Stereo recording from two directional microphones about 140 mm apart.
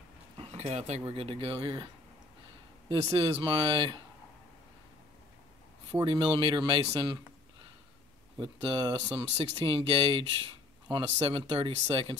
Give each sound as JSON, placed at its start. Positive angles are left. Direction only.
{"t": 0.4, "sound": "speech", "side_deg": -45}
{"t": 2.9, "sound": "speech", "side_deg": -45}
{"t": 5.9, "sound": "speech", "side_deg": -35}
{"t": 8.4, "sound": "speech", "side_deg": -35}